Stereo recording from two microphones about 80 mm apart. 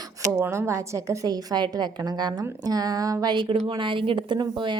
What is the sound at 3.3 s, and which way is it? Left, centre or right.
Speech, right.